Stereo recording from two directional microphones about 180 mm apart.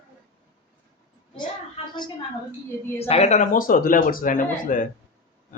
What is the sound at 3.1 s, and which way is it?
Speech, 35° left (ahead or behind).